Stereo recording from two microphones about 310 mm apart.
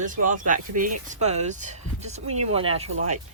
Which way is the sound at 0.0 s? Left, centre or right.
Right.